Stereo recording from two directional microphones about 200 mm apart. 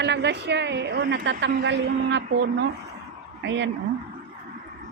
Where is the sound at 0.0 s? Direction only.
60° right (ahead or behind).